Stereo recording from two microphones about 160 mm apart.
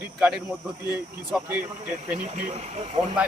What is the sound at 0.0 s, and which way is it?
A man's voice, 5° right (ahead or behind).